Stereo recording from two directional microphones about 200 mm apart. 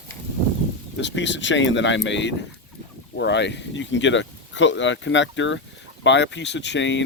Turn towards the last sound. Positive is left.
turn(degrees=65)  # may be behind; listen again after turning